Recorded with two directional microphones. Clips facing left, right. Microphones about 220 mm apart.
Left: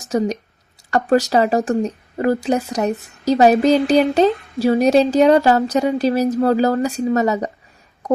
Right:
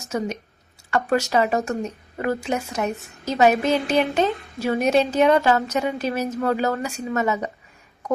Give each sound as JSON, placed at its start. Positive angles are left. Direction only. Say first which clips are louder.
{"t": 0.0, "sound": "speech", "louder": "left 7 dB", "side_deg": 35}